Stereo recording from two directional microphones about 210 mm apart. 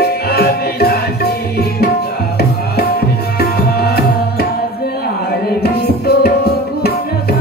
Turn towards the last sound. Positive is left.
turn(degrees=50)  # may be behind; listen again after turning